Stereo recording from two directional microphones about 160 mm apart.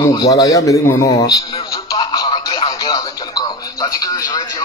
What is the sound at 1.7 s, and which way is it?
Radio, 25° left (ahead or behind).